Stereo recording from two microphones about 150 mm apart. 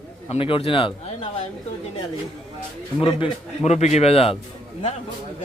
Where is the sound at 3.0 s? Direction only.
45° left (ahead or behind).